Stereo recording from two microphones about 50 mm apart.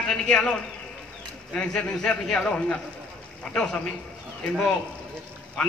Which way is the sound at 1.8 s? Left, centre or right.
Centre.